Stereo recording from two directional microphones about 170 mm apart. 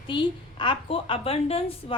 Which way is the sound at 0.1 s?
30° left (ahead or behind).